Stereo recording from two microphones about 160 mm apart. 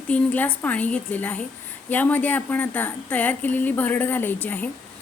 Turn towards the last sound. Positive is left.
turn(degrees=10)  # may be behind; listen again after turning